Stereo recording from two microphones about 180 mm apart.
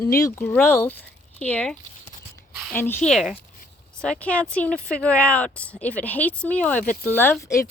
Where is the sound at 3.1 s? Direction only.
Centre (ahead or behind).